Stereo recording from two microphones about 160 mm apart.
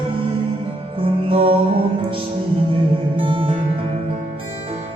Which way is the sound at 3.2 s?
30° right (ahead or behind).